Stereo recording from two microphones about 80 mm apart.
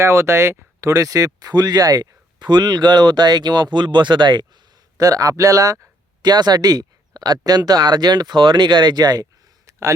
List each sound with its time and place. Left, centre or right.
0.0 s speech: right
4.9 s speech: right
6.3 s speech: right